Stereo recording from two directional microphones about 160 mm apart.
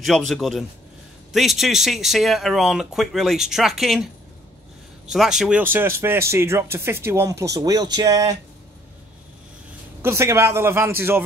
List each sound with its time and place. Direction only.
0.0 s speech: centre (ahead or behind); by 8.4 s 25° right (ahead or behind)
10.0 s speech: 15° right (ahead or behind)